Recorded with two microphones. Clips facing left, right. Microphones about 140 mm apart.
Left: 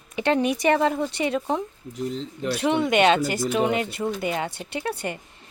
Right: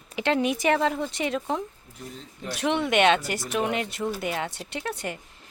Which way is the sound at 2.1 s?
90° left.